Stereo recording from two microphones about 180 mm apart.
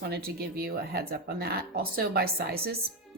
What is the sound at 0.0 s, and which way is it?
Speech, 60° right (ahead or behind).